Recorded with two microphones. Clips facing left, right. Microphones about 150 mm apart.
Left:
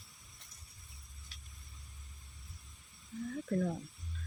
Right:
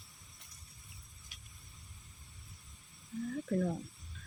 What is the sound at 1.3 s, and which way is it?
Vehicle, 15° right (ahead or behind).